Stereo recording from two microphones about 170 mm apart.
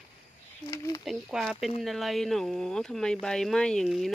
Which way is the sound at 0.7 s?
25° left (ahead or behind).